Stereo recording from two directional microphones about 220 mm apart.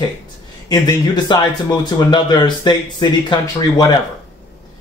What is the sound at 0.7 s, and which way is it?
Speech, 20° left (ahead or behind).